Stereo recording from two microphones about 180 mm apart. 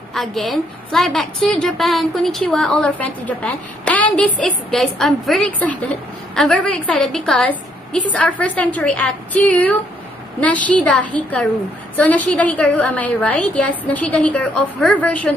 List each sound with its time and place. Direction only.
0.1 s a woman's voice: centre (ahead or behind)